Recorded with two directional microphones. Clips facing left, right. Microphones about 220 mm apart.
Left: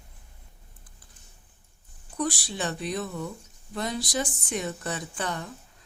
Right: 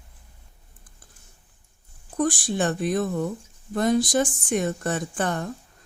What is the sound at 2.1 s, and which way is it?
Speech, 50° right (ahead or behind).